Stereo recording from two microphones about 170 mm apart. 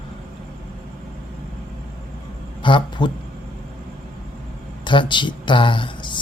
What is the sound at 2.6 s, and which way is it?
Speech, 25° left (ahead or behind).